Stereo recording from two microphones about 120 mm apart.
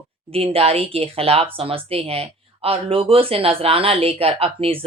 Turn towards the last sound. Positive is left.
turn(degrees=-55)  # may be behind; listen again after turning